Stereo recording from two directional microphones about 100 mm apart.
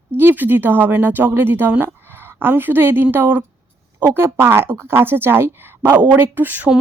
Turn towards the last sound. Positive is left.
turn(degrees=-20)  # may be behind; listen again after turning